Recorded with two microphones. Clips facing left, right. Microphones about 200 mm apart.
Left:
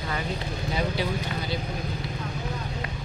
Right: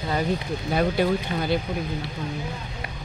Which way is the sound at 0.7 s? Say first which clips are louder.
Right 7 dB; 55° right (ahead or behind).